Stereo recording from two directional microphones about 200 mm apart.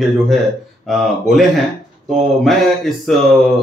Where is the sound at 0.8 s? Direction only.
Centre (ahead or behind).